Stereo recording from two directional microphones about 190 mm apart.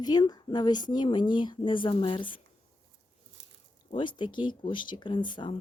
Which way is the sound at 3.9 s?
25° left (ahead or behind).